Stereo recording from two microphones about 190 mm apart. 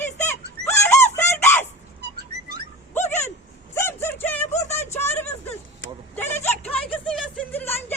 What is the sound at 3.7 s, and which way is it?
Vehicle, 15° left (ahead or behind).